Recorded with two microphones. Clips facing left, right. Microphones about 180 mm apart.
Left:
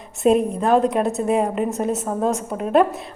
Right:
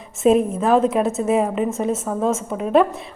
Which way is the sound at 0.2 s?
Centre (ahead or behind).